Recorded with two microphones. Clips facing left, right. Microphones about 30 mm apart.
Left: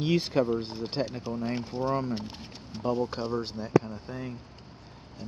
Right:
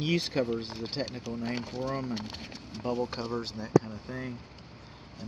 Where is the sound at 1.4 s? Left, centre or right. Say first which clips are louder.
Left 1 dB; right.